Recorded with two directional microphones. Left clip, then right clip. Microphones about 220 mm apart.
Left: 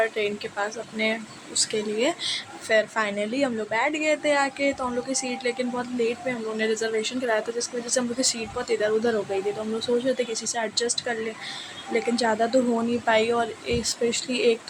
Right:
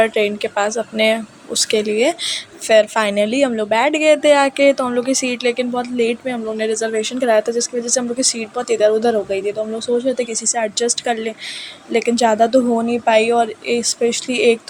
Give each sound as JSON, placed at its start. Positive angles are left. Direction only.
{"t": 0.0, "sound": "speech", "side_deg": -30}